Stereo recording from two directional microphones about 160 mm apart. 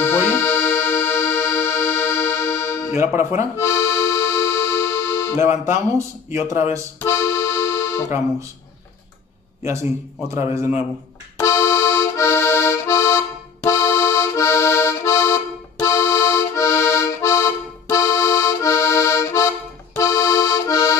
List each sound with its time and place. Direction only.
0.0 s music: 15° left (ahead or behind)
2.9 s speech: 15° right (ahead or behind)
3.5 s accordion: 15° left (ahead or behind)
5.9 s speech: 20° right (ahead or behind)
7.0 s accordion: 15° left (ahead or behind)
10.2 s a man's voice: 20° right (ahead or behind)
11.3 s accordion: 15° left (ahead or behind)